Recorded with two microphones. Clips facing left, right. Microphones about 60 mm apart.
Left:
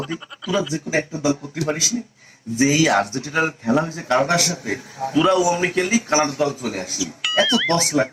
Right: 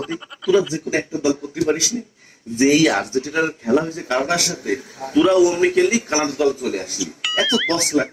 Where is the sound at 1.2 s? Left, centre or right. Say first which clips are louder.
Right 2 dB; left.